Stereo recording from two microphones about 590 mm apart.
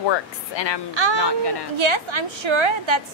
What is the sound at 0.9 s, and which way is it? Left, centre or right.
Speech, right.